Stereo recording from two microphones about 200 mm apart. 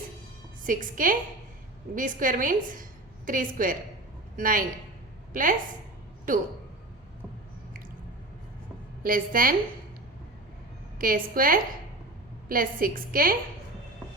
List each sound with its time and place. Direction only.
0.6 s a woman's voice: 45° right (ahead or behind)
9.0 s a woman's voice: 45° right (ahead or behind)
10.9 s a woman's voice: 45° right (ahead or behind)